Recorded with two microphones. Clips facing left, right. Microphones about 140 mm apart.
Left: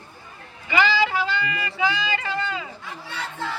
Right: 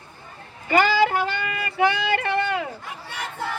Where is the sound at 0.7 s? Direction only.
50° right (ahead or behind).